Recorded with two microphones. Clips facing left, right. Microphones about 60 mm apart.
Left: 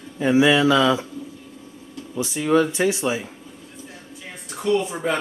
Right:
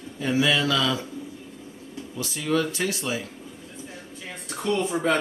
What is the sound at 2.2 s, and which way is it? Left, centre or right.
Speech, left.